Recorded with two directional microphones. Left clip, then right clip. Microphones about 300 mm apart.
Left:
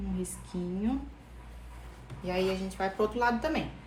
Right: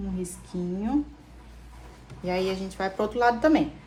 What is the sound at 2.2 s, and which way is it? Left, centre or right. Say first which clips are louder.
A woman's voice: right 3 dB; right.